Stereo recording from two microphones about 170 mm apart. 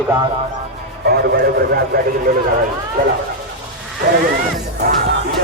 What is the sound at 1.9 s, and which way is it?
Speech, 65° right (ahead or behind).